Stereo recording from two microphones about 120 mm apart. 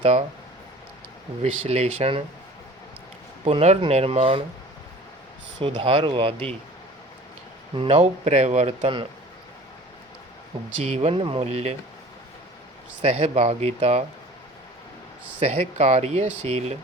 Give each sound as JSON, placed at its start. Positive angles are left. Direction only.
{"t": 0.0, "sound": "speech", "side_deg": -55}
{"t": 1.4, "sound": "speech", "side_deg": -60}
{"t": 3.4, "sound": "speech", "side_deg": -65}
{"t": 5.5, "sound": "speech", "side_deg": -45}
{"t": 7.8, "sound": "speech", "side_deg": -55}
{"t": 10.8, "sound": "speech", "side_deg": -65}
{"t": 11.1, "sound": "speech", "side_deg": -45}
{"t": 13.0, "sound": "speech", "side_deg": -65}
{"t": 15.4, "sound": "speech", "side_deg": -60}